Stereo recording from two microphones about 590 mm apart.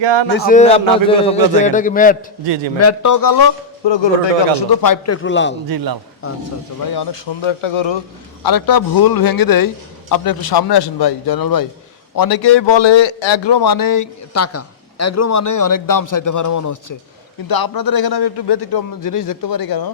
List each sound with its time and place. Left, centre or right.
0.0 s speech: right
0.3 s a man's voice: centre
2.7 s a man's voice: left
3.8 s a man's voice: left; by 5.5 s centre
5.6 s a man's voice: right
6.2 s speech: left
6.9 s a man's voice: left
8.4 s a man's voice: left